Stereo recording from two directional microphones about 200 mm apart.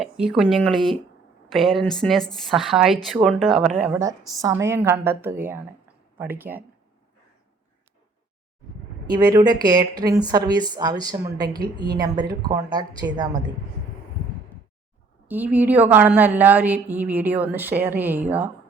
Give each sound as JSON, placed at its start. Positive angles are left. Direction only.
{"t": 0.0, "sound": "a woman's voice", "side_deg": 0}
{"t": 9.0, "sound": "speech", "side_deg": -20}
{"t": 15.3, "sound": "a woman's voice", "side_deg": -10}